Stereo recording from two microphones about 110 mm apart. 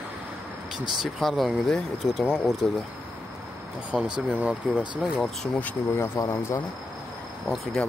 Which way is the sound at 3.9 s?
10° left (ahead or behind).